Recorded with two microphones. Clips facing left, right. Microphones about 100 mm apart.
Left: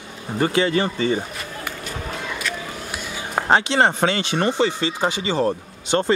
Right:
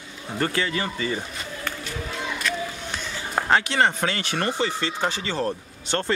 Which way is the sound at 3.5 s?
25° left (ahead or behind).